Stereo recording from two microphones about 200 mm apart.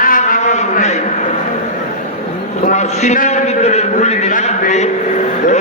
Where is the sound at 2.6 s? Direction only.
35° left (ahead or behind).